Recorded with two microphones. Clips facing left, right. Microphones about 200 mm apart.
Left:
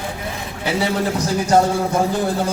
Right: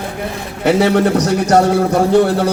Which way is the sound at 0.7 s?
70° right (ahead or behind).